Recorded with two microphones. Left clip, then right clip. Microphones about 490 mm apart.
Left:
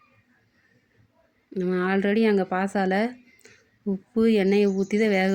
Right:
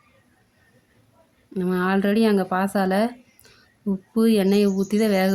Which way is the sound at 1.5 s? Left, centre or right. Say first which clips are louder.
Right 2 dB; right.